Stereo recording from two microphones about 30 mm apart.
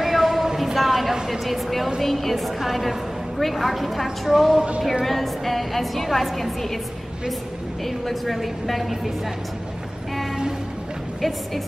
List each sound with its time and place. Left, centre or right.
0.0 s a sound: centre
1.1 s a woman's voice: centre
1.4 s a woman's voice: centre
7.8 s a woman's voice: centre
11.1 s a woman's voice: centre